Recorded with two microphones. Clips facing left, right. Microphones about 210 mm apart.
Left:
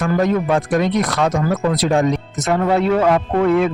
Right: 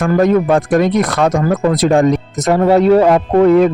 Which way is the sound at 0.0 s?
50° right (ahead or behind).